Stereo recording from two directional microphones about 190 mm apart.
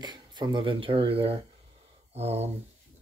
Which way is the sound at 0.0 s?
25° right (ahead or behind).